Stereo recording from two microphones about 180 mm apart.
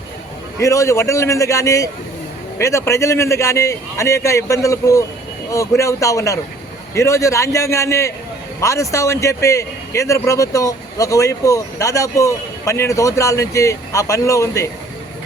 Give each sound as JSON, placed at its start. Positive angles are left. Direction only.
{"t": 0.6, "sound": "a man's voice", "side_deg": 15}